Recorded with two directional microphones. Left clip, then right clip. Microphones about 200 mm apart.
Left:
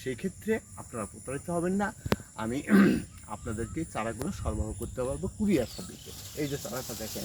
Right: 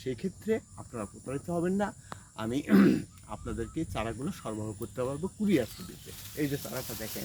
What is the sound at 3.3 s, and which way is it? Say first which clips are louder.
Speech: left 2 dB; 35° right (ahead or behind).